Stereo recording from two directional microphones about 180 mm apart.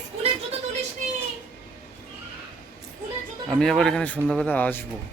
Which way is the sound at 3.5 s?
Centre (ahead or behind).